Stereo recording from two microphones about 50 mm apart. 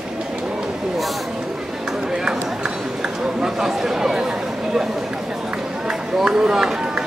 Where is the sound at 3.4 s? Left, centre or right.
Centre.